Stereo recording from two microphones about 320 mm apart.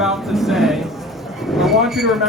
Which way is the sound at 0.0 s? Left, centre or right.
Centre.